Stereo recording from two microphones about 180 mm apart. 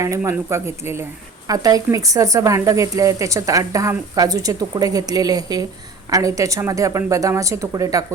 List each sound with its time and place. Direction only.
0.0 s speech: 15° right (ahead or behind)